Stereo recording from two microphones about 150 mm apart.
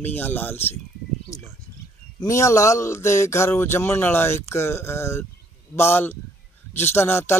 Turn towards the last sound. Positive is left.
turn(degrees=15)  # may be behind; listen again after turning